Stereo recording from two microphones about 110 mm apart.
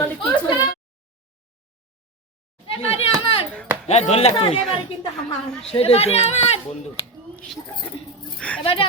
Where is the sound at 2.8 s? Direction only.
65° left (ahead or behind).